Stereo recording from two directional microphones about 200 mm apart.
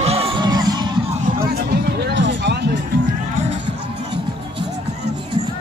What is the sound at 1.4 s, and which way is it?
Music, 55° right (ahead or behind).